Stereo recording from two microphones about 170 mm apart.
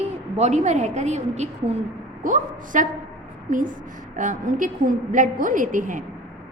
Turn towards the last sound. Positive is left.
turn(degrees=-50)  # may be behind; listen again after turning